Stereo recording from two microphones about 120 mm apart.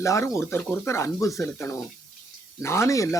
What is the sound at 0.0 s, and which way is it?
Speech, 25° left (ahead or behind).